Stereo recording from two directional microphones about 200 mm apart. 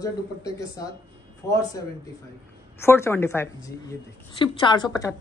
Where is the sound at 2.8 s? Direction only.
15° left (ahead or behind).